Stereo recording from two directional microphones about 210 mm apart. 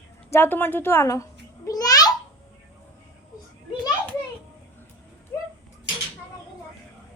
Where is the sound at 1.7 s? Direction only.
15° left (ahead or behind).